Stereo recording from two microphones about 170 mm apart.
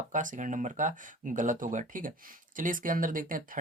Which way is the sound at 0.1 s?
50° right (ahead or behind).